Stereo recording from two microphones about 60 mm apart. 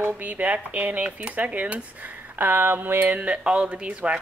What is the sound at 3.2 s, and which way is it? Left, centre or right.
Speech, centre.